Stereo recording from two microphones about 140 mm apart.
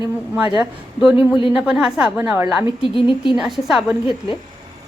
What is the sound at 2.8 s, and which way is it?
Speech, 40° left (ahead or behind).